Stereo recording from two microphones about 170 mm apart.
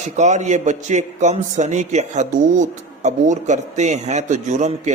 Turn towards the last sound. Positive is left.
turn(degrees=-45)  # may be behind; listen again after turning